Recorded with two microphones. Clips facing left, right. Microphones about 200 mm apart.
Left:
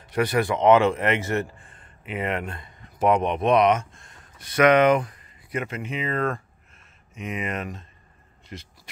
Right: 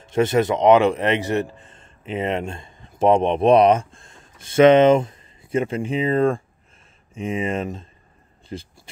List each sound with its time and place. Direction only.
0.0 s a man's voice: 25° right (ahead or behind)